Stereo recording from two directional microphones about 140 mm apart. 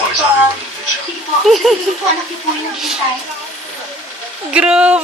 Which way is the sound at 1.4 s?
Centre (ahead or behind).